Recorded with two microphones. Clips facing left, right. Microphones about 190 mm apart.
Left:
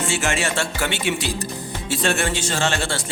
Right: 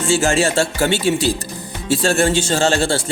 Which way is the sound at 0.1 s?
30° right (ahead or behind).